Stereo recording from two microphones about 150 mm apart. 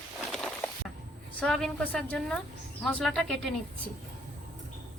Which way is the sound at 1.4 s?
Centre (ahead or behind).